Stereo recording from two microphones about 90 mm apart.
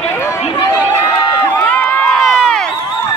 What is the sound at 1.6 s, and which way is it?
Run, 15° left (ahead or behind).